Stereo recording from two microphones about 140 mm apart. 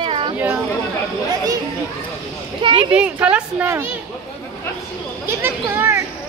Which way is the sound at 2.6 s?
35° right (ahead or behind).